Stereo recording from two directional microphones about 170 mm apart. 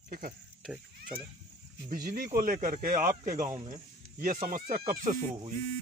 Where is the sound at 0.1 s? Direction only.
60° right (ahead or behind).